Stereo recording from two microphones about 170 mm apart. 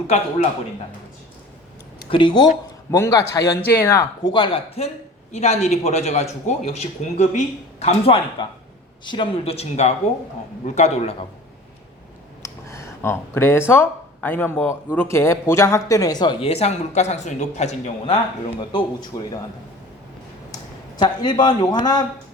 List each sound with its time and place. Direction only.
2.0 s a man's voice: 30° left (ahead or behind)
12.4 s speech: 15° left (ahead or behind); by 18.2 s 35° left (ahead or behind)
18.7 s speech: 25° left (ahead or behind)
20.5 s speech: 25° left (ahead or behind)